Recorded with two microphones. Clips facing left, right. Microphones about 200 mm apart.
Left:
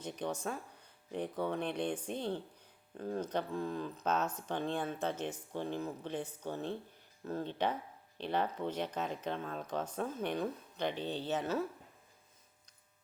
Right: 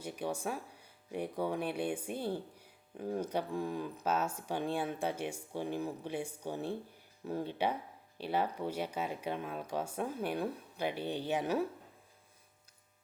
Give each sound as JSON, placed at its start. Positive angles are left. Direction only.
{"t": 0.0, "sound": "speech", "side_deg": -10}